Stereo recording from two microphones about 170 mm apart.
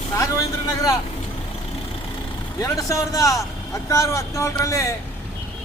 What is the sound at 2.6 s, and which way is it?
Speech, 20° left (ahead or behind).